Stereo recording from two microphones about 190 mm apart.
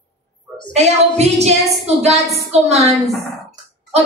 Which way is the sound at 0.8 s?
35° right (ahead or behind).